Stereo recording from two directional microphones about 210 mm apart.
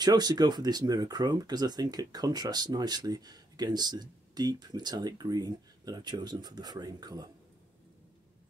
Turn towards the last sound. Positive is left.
turn(degrees=-20)  # may be behind; listen again after turning